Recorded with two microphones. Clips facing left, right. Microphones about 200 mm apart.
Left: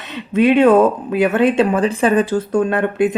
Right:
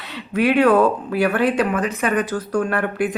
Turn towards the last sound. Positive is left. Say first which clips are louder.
# left 5 dB
turn(degrees=20)  # may be behind; listen again after turning